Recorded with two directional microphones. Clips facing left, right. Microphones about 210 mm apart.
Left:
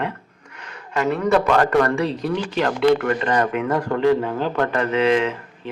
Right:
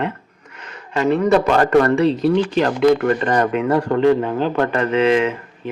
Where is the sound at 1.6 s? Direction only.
25° right (ahead or behind).